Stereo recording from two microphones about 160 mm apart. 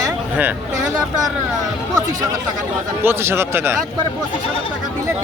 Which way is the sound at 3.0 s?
15° right (ahead or behind).